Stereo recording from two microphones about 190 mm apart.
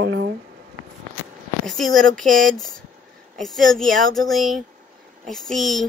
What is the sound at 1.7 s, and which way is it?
A woman's voice, centre (ahead or behind).